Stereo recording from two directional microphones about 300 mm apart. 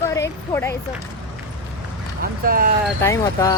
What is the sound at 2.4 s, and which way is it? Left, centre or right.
Speech, right.